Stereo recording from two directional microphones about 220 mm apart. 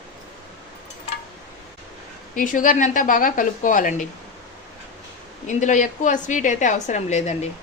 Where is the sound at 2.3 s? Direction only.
35° left (ahead or behind).